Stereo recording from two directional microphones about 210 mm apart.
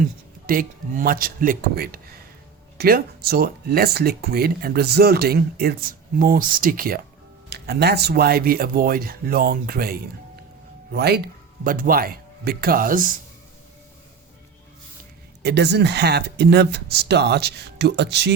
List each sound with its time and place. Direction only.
0.0 s speech: 40° right (ahead or behind)
15.4 s speech: 55° right (ahead or behind)